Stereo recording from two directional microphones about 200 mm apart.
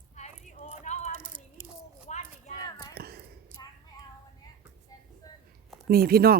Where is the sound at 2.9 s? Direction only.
50° right (ahead or behind).